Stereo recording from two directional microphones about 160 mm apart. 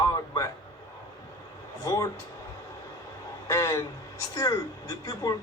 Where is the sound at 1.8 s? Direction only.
20° left (ahead or behind).